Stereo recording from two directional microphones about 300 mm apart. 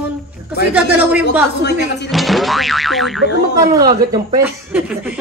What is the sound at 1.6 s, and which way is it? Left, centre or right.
Speech, left.